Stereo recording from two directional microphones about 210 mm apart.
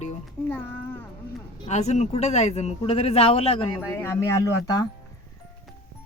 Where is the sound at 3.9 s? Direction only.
10° left (ahead or behind).